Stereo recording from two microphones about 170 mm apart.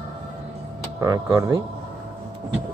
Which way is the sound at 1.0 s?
20° right (ahead or behind).